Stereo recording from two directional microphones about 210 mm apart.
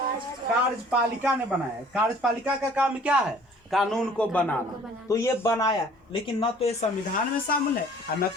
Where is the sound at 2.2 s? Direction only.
5° right (ahead or behind); by 5.7 s 15° left (ahead or behind).